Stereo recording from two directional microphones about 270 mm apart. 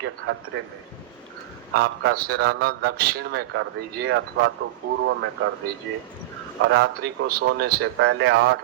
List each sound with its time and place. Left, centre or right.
0.0 s a man's voice: right
1.7 s a man's voice: right
6.7 s a man's voice: right